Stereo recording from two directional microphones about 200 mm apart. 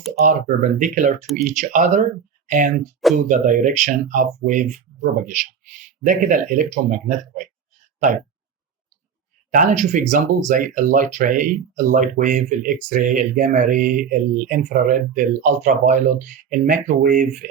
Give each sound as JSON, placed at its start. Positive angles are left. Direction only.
{"t": 0.4, "sound": "speech", "side_deg": -40}
{"t": 9.6, "sound": "speech", "side_deg": -35}